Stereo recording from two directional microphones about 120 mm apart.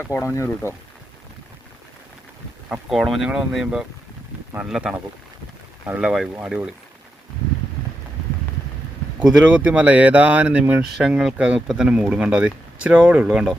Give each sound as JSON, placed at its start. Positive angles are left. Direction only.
{"t": 0.0, "sound": "speech", "side_deg": 20}
{"t": 2.9, "sound": "speech", "side_deg": 0}
{"t": 9.2, "sound": "speech", "side_deg": -10}